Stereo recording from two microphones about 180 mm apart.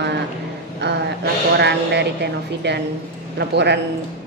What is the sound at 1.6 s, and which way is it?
Speech, 70° right (ahead or behind).